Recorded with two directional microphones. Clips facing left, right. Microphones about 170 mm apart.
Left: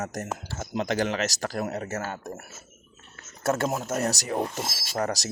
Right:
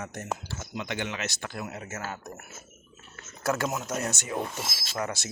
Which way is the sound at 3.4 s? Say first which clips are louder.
Left 3 dB; 25° left (ahead or behind).